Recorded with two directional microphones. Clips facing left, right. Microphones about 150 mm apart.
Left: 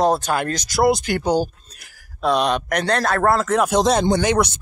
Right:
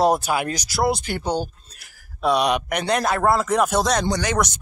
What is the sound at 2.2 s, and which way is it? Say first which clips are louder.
A man's voice: left 1 dB; 10° right (ahead or behind).